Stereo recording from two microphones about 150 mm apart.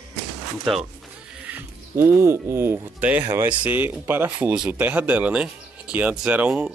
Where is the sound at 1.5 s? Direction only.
15° right (ahead or behind).